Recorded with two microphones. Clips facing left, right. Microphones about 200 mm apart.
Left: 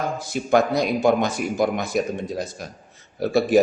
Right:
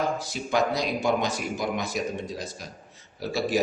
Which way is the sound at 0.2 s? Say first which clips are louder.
Left 6 dB; 55° left (ahead or behind).